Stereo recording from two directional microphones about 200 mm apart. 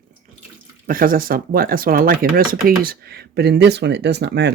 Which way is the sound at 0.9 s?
45° right (ahead or behind).